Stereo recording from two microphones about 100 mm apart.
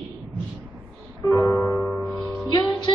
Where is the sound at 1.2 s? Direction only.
30° left (ahead or behind).